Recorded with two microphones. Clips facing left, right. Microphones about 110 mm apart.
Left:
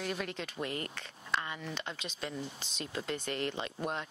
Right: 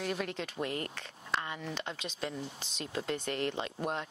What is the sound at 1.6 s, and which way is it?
Speech, 40° right (ahead or behind).